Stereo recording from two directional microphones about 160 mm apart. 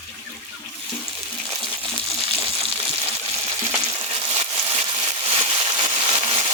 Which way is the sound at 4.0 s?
35° right (ahead or behind).